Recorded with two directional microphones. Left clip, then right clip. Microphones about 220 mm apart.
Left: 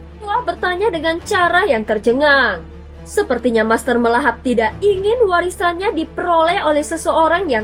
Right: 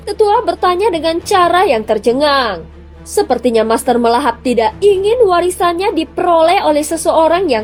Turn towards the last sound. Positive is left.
turn(degrees=-30)  # may be behind; listen again after turning